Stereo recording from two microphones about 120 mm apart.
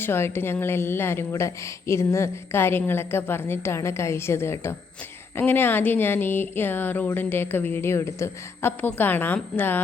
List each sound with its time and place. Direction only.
0.0 s a woman's voice: 20° left (ahead or behind)